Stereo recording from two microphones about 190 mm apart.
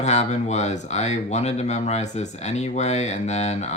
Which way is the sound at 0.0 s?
35° left (ahead or behind).